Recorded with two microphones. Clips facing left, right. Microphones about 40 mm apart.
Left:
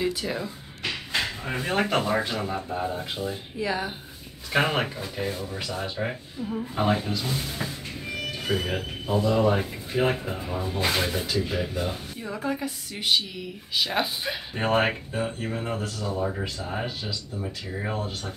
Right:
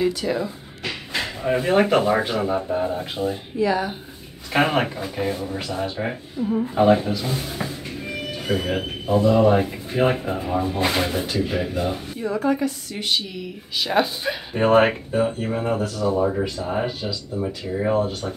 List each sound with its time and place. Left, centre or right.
0.2 s speech: centre
3.5 s speech: centre
4.5 s speech: centre
7.1 s speech: centre
8.5 s speech: centre
12.3 s speech: centre
16.1 s speech: right
16.7 s speech: right